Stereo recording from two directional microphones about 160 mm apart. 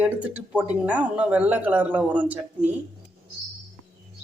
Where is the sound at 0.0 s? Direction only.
10° right (ahead or behind).